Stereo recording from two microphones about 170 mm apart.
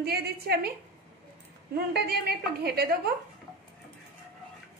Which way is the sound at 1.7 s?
65° right (ahead or behind).